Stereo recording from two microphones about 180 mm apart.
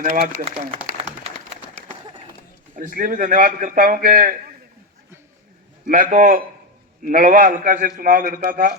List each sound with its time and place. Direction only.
2.7 s a man's voice: 50° right (ahead or behind)
5.8 s a man's voice: 45° right (ahead or behind)